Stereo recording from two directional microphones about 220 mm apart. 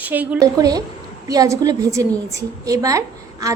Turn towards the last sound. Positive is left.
turn(degrees=-15)  # may be behind; listen again after turning